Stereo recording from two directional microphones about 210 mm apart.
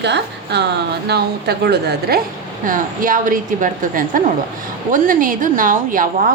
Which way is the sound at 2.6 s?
40° right (ahead or behind).